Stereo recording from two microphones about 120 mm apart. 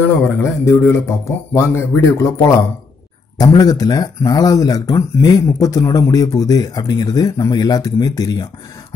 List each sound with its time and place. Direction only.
0.0 s speech: 25° left (ahead or behind)